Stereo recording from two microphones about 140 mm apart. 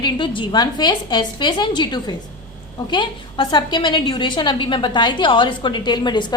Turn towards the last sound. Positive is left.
turn(degrees=30)  # may be behind; listen again after turning